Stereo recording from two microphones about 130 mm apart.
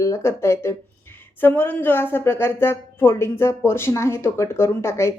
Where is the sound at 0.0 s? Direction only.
20° left (ahead or behind).